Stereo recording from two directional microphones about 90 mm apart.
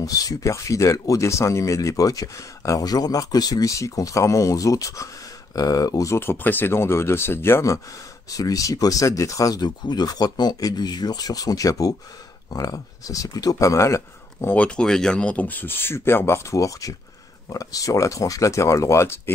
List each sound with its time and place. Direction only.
0.0 s speech: 45° left (ahead or behind)
6.1 s speech: 25° left (ahead or behind)
8.3 s speech: 40° left (ahead or behind)
14.5 s speech: 10° left (ahead or behind); by 19.3 s 30° left (ahead or behind)